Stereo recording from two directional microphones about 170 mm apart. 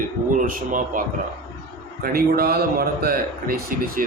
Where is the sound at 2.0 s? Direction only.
60° right (ahead or behind).